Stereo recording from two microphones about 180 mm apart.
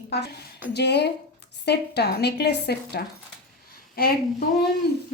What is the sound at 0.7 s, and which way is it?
A woman's voice, 70° left (ahead or behind).